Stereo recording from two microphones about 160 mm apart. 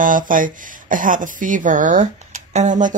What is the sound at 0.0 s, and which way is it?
Speech, 55° right (ahead or behind).